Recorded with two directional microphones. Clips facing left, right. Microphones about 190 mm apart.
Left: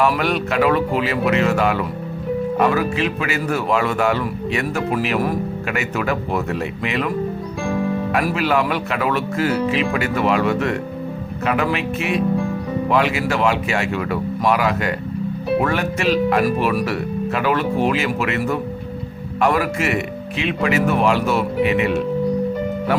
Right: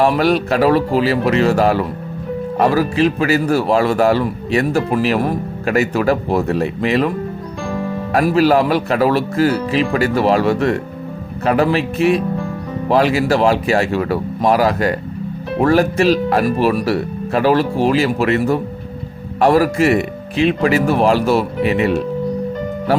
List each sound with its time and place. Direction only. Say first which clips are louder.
0.0 s speech: right 4 dB; 35° right (ahead or behind)
8.1 s speech: right 9 dB; 35° right (ahead or behind)